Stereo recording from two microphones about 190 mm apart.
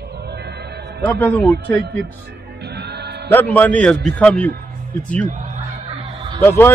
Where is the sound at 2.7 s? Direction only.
60° right (ahead or behind).